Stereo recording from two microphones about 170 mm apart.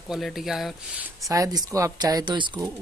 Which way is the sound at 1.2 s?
20° right (ahead or behind).